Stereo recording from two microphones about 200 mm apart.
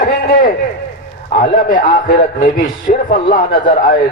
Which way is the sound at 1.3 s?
40° left (ahead or behind).